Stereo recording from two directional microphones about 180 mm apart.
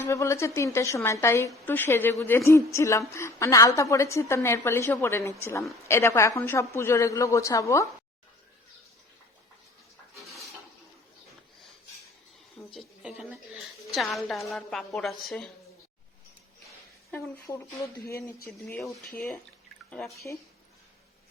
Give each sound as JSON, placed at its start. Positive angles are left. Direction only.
{"t": 0.1, "sound": "a woman's voice", "side_deg": 15}
{"t": 12.5, "sound": "a woman's voice", "side_deg": 0}
{"t": 17.1, "sound": "a woman's voice", "side_deg": 15}
{"t": 18.6, "sound": "speech", "side_deg": 0}
{"t": 20.3, "sound": "a woman's voice", "side_deg": 15}